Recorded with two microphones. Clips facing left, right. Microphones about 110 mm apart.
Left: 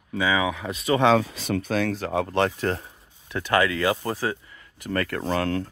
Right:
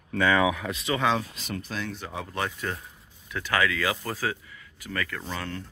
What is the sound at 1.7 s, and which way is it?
Speech, 80° left.